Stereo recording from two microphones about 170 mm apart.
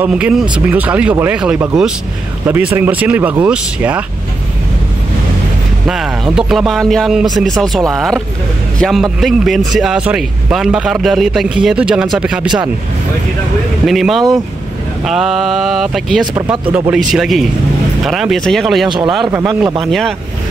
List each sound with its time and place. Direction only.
0.0 s speech: 5° right (ahead or behind)
5.9 s a man's voice: centre (ahead or behind)
13.8 s a man's voice: centre (ahead or behind)
18.9 s speech: 25° right (ahead or behind)
19.9 s a man's voice: centre (ahead or behind)